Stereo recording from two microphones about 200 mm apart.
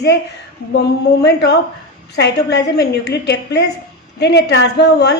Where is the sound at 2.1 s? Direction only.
55° left (ahead or behind).